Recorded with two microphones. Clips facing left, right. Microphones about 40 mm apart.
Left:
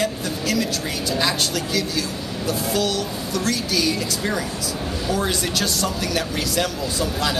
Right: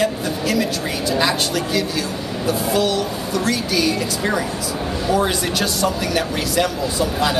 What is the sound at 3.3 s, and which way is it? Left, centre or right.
Speech, right.